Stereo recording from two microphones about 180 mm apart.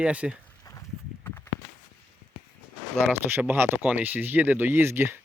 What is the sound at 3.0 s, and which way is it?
Speech, 10° right (ahead or behind).